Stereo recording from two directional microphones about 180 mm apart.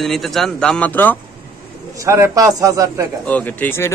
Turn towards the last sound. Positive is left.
turn(degrees=10)  # may be behind; listen again after turning